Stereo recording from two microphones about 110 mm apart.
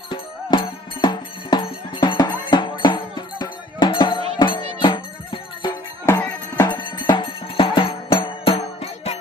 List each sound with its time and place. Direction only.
0.1 s music: 45° left (ahead or behind)
6.1 s music: 20° left (ahead or behind)
6.6 s music: 40° left (ahead or behind); by 9.1 s 65° left (ahead or behind)